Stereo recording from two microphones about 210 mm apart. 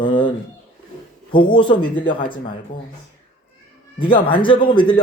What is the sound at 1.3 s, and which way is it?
A man's voice, 25° left (ahead or behind).